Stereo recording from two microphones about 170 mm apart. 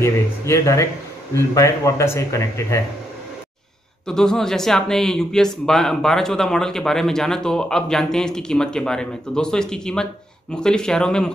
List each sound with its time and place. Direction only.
0.0 s speech: 15° left (ahead or behind)
4.1 s speech: 5° left (ahead or behind)